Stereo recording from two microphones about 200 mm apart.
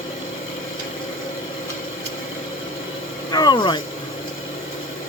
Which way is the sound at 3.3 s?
20° left (ahead or behind).